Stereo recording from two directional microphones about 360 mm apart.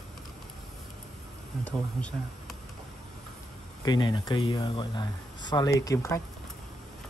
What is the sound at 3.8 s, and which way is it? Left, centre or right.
Speech, centre.